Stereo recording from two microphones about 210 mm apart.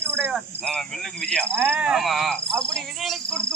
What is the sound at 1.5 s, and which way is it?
Speech, 10° right (ahead or behind).